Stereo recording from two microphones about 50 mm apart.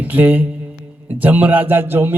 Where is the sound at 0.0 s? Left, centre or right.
Right.